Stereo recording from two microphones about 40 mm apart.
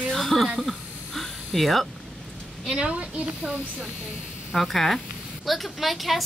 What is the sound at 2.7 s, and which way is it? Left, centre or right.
Speech, right.